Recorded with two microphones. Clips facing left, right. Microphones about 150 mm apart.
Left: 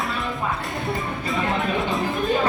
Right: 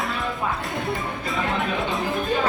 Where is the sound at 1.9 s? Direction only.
Centre (ahead or behind).